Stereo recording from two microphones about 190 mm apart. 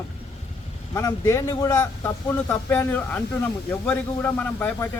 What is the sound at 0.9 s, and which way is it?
Speech, 15° left (ahead or behind).